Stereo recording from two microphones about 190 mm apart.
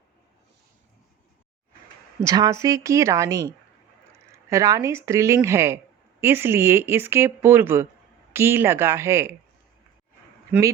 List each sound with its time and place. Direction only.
2.2 s speech: 20° right (ahead or behind)